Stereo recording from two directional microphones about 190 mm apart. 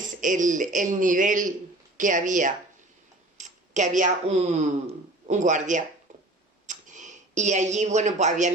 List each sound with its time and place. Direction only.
0.2 s a woman's voice: 40° right (ahead or behind)